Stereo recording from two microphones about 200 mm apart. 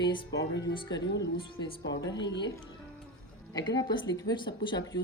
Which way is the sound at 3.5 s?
20° left (ahead or behind).